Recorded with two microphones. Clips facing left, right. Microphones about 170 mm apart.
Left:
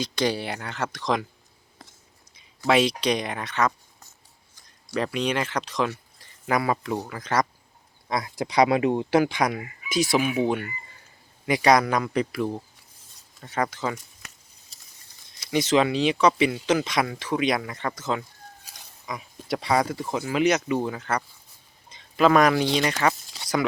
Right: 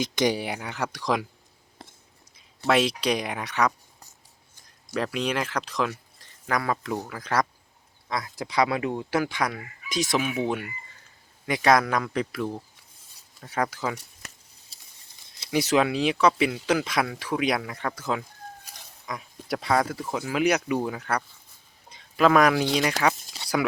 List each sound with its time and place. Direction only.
0.0 s speech: 15° right (ahead or behind)
2.6 s speech: centre (ahead or behind)
4.9 s speech: centre (ahead or behind)
6.5 s speech: 10° left (ahead or behind)
7.1 s speech: 5° right (ahead or behind)
8.1 s speech: 15° left (ahead or behind)
9.9 s speech: 5° left (ahead or behind)
13.4 s speech: 10° right (ahead or behind)
15.4 s speech: 5° right (ahead or behind)
23.0 s a sound: 5° right (ahead or behind)